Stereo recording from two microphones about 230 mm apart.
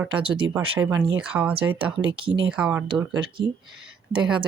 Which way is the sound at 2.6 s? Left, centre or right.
Centre.